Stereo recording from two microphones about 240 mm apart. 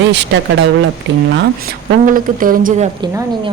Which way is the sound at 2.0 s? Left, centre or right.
Right.